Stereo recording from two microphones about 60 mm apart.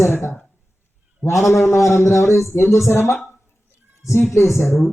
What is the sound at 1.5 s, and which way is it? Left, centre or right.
Speech, left.